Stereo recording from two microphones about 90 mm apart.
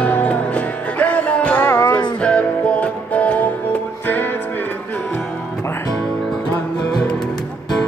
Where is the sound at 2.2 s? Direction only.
10° left (ahead or behind).